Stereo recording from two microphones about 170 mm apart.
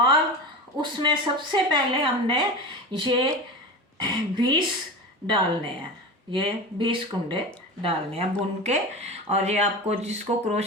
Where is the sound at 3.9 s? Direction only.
25° right (ahead or behind).